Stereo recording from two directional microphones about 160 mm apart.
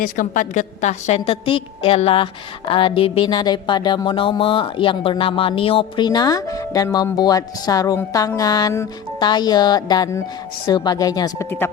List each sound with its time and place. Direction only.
0.0 s a woman's voice: 55° left (ahead or behind); by 11.7 s 15° left (ahead or behind)